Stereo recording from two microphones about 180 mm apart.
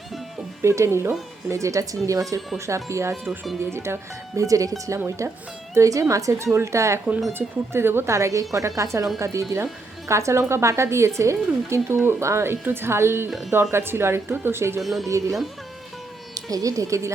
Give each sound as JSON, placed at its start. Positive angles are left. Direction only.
{"t": 0.6, "sound": "a woman's voice", "side_deg": -15}
{"t": 14.8, "sound": "speech", "side_deg": 0}
{"t": 15.0, "sound": "a woman's voice", "side_deg": -15}